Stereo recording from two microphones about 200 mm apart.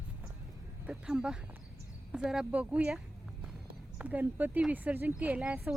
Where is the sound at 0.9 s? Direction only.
5° right (ahead or behind).